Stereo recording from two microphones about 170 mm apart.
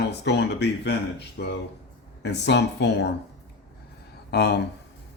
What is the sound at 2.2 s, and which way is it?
Speech, 90° left.